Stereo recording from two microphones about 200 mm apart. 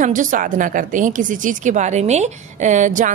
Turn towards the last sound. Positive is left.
turn(degrees=-40)  # may be behind; listen again after turning